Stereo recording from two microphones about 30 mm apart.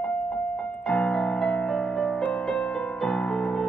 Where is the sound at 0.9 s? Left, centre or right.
Left.